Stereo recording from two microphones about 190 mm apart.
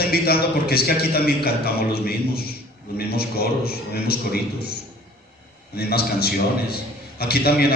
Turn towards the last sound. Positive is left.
turn(degrees=55)  # may be behind; listen again after turning